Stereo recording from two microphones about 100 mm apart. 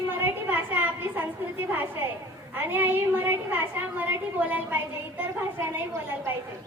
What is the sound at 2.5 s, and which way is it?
A woman's voice, 20° right (ahead or behind).